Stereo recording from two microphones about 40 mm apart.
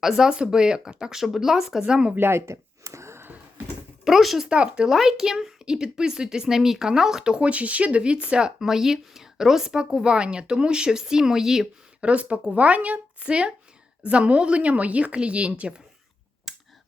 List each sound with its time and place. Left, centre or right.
0.0 s a woman's voice: centre
1.8 s a woman's voice: right
2.1 s speech: right
4.0 s speech: centre
4.4 s a woman's voice: right
4.9 s a woman's voice: centre
7.3 s a woman's voice: right
8.6 s a woman's voice: centre
11.9 s a woman's voice: right
16.5 s clicking: centre